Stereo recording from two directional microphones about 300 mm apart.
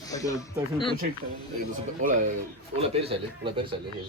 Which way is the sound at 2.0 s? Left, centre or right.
Right.